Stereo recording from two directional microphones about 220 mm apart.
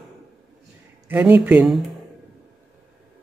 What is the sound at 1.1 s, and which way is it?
Speech, 10° right (ahead or behind).